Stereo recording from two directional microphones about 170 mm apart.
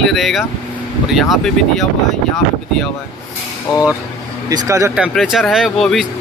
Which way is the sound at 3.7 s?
25° left (ahead or behind).